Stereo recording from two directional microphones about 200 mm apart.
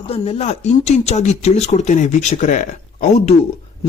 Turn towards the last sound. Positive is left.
turn(degrees=35)  # may be behind; listen again after turning